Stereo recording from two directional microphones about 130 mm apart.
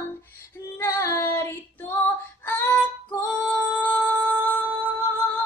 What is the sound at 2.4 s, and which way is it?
Music, 15° left (ahead or behind).